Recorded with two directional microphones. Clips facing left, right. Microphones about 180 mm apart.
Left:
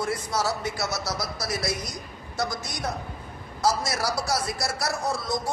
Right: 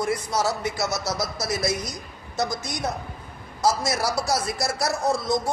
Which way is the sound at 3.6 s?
20° right (ahead or behind).